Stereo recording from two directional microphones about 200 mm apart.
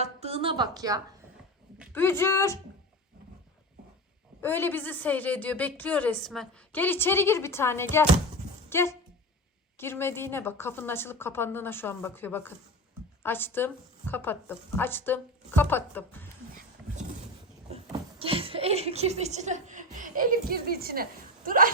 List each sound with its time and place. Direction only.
0.0 s a woman's voice: 30° right (ahead or behind)
1.9 s a woman's voice: 10° left (ahead or behind)
4.4 s a woman's voice: 10° left (ahead or behind)
17.9 s speech: 25° right (ahead or behind); by 21.7 s 45° right (ahead or behind)